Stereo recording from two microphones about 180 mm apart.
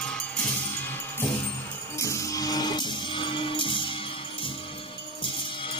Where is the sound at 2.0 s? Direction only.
15° left (ahead or behind).